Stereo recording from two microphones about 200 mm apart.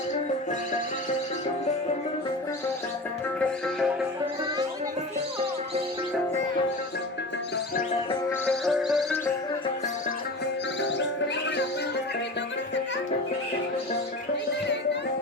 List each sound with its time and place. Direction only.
8.3 s music: centre (ahead or behind)
10.4 s music: 60° left (ahead or behind)